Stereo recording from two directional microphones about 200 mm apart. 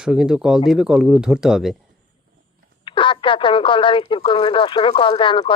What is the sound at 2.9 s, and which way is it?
Speech, 25° left (ahead or behind).